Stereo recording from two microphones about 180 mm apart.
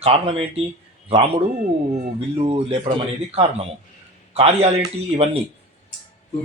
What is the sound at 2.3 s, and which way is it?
Speech, 35° right (ahead or behind).